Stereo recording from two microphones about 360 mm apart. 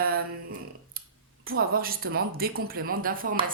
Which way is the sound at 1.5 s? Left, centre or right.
Right.